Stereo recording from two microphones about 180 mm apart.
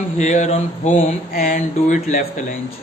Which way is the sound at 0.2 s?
40° left (ahead or behind).